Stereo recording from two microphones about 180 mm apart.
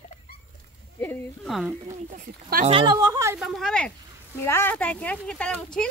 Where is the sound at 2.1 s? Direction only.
50° right (ahead or behind).